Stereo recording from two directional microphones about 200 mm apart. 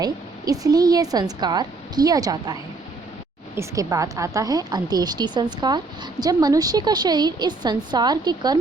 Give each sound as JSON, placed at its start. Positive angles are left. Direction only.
{"t": 0.0, "sound": "a woman's voice", "side_deg": -20}